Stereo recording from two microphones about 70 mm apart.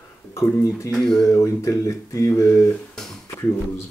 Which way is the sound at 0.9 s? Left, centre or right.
Centre.